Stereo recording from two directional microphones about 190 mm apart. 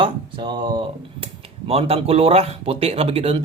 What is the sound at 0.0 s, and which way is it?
Speech, 25° right (ahead or behind).